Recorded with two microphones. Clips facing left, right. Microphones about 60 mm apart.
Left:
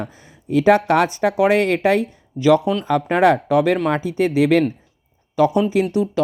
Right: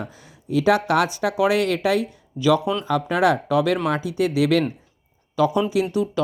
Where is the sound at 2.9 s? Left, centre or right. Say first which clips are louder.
Left 4 dB; left.